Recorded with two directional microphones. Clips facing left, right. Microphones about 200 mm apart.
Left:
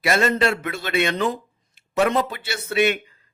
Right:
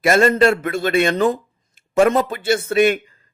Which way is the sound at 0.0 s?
50° right (ahead or behind).